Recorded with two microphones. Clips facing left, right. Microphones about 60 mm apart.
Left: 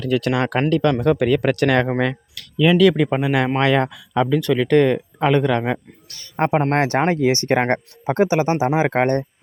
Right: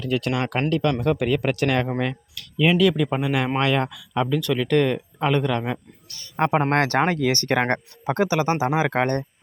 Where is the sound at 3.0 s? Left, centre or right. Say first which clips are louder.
Left 4 dB; left.